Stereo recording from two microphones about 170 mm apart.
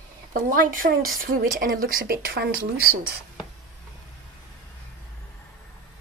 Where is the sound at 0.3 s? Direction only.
55° right (ahead or behind).